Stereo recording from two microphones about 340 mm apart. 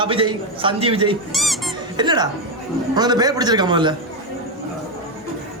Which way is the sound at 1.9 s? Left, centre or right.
Centre.